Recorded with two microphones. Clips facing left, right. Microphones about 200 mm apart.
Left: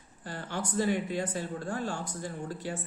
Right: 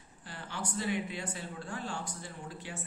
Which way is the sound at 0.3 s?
45° left (ahead or behind).